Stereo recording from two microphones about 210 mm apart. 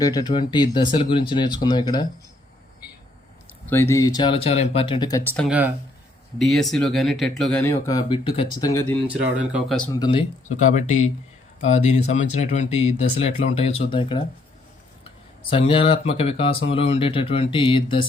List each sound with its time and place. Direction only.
0.0 s speech: 20° left (ahead or behind)
3.7 s speech: 10° left (ahead or behind)
5.5 s speech: 5° right (ahead or behind)
7.6 s speech: 15° left (ahead or behind)
9.0 s speech: 5° right (ahead or behind)
9.9 s speech: 20° left (ahead or behind)
10.7 s speech: 35° left (ahead or behind)
15.4 s speech: 25° left (ahead or behind)